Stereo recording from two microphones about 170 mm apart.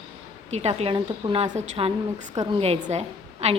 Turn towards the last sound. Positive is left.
turn(degrees=-35)  # may be behind; listen again after turning